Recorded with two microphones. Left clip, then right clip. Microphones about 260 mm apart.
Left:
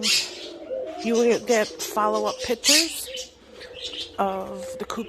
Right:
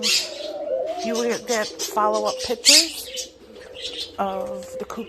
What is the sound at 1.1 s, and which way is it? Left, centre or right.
Speech, left.